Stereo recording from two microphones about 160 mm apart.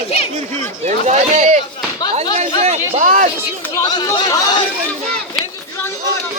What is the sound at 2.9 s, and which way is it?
Speech, 55° right (ahead or behind).